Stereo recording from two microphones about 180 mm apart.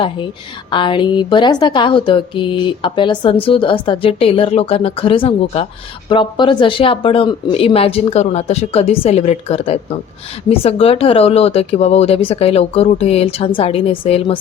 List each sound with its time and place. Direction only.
0.7 s a woman's voice: 25° left (ahead or behind)